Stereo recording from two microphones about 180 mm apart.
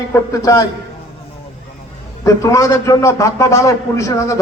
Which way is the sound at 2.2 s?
20° left (ahead or behind).